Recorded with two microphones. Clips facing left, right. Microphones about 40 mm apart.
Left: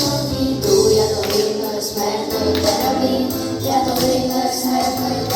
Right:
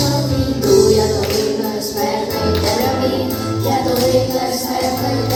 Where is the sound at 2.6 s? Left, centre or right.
Centre.